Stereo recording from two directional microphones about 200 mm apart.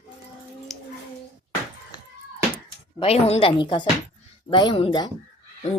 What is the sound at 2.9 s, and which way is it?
Speech, 30° left (ahead or behind).